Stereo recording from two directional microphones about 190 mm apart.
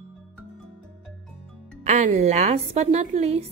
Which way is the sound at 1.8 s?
40° right (ahead or behind).